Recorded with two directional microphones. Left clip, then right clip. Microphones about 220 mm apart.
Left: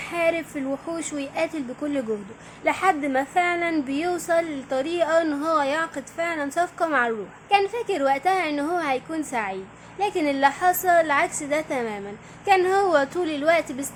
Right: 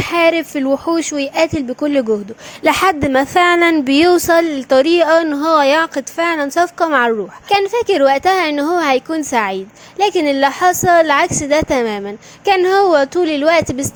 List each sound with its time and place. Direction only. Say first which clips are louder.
0.0 s a woman's voice: right 10 dB; 40° right (ahead or behind)